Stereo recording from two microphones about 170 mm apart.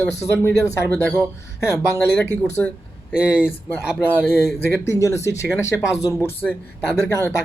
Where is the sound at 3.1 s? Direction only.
5° right (ahead or behind).